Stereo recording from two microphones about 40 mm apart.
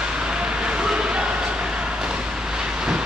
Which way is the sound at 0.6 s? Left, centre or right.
Right.